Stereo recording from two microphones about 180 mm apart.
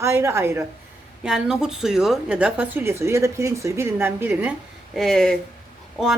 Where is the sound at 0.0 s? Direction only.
15° right (ahead or behind).